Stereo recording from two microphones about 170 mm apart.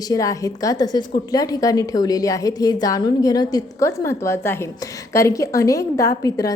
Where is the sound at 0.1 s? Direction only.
20° left (ahead or behind).